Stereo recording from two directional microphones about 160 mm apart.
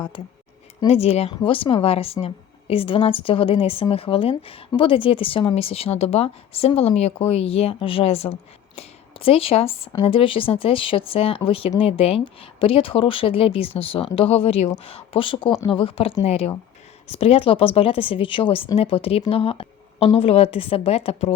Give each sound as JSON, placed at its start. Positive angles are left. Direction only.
{"t": 0.9, "sound": "speech", "side_deg": 40}